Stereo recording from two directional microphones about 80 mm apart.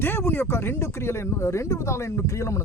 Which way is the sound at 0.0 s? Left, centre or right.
Left.